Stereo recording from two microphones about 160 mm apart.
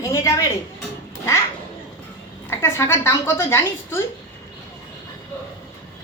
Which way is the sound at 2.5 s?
15° left (ahead or behind).